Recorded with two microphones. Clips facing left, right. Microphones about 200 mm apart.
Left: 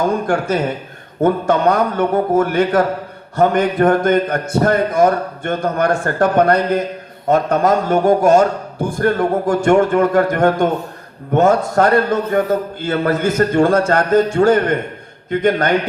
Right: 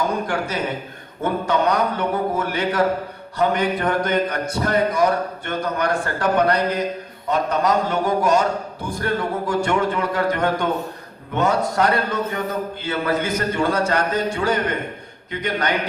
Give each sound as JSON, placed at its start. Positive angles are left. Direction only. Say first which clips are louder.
{"t": 0.3, "sound": "a man's voice", "louder": "left 7 dB", "side_deg": 50}